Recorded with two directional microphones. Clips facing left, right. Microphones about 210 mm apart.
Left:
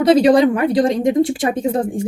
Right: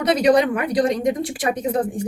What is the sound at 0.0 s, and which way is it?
A woman's voice, 30° left (ahead or behind).